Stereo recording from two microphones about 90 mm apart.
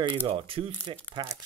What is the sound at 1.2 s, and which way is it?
Speech, 55° right (ahead or behind).